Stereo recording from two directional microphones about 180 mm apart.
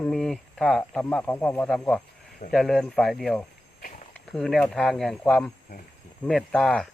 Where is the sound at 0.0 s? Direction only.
5° left (ahead or behind).